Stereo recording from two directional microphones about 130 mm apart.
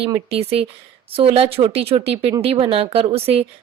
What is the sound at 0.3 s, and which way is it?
A woman's voice, 50° right (ahead or behind).